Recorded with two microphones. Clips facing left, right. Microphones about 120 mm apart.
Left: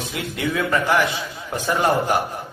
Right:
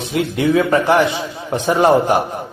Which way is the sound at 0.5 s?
30° right (ahead or behind).